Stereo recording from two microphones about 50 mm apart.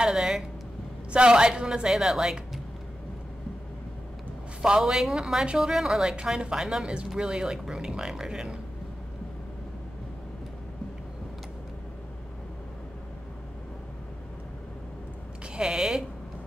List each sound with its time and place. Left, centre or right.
0.0 s a sound: centre
1.1 s a woman's voice: centre
4.6 s a woman's voice: centre
15.5 s speech: centre